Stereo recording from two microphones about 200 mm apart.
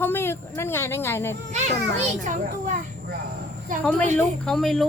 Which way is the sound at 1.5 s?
35° right (ahead or behind).